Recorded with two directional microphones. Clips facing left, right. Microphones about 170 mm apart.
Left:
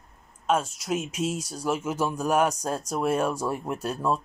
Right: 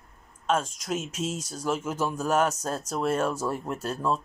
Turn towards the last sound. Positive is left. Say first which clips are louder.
# left 1 dB
turn(degrees=10)  # may be behind; listen again after turning